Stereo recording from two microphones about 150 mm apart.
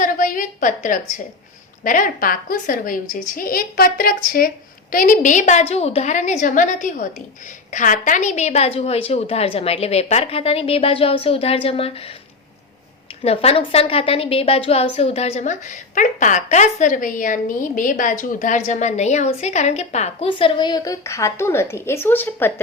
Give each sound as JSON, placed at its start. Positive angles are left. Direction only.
{"t": 0.0, "sound": "a sound", "side_deg": 60}
{"t": 1.8, "sound": "a woman's voice", "side_deg": 65}
{"t": 13.2, "sound": "a woman's voice", "side_deg": 40}
{"t": 20.2, "sound": "a woman's voice", "side_deg": 30}